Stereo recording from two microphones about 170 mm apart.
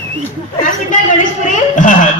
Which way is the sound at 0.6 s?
50° left (ahead or behind).